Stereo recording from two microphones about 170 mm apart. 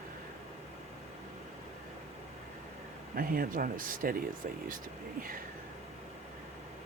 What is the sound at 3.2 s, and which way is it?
Speech, 55° right (ahead or behind).